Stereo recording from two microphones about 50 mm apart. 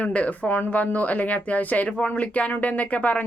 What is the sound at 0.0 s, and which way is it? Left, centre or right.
Speech, left.